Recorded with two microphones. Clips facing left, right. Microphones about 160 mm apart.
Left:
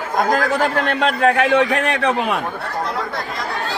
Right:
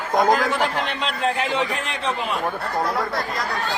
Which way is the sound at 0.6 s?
50° left (ahead or behind).